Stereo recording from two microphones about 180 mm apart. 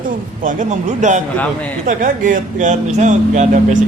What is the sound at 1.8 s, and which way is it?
Speech, 45° right (ahead or behind).